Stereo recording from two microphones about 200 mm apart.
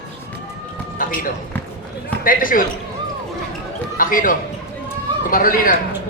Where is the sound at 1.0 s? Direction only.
45° left (ahead or behind).